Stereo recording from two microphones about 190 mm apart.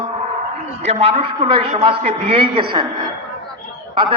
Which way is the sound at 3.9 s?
25° right (ahead or behind).